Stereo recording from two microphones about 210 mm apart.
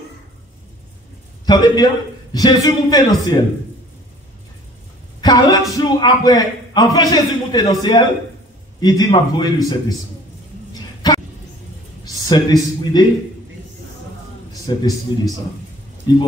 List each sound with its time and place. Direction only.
1.4 s a man's voice: 20° left (ahead or behind)
5.2 s a man's voice: 20° left (ahead or behind)
11.0 s a sound: 20° left (ahead or behind)
12.0 s speech: 20° left (ahead or behind)
14.5 s a man's voice: 15° left (ahead or behind)